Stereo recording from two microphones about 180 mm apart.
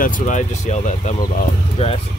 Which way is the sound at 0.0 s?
45° left (ahead or behind).